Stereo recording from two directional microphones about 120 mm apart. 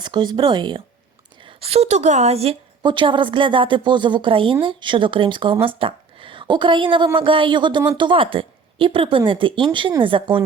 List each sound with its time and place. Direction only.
0.0 s speech: 40° right (ahead or behind)
1.5 s a woman's voice: 55° right (ahead or behind)
2.8 s speech: 40° right (ahead or behind)